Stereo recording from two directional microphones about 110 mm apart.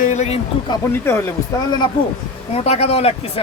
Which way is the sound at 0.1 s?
90° left.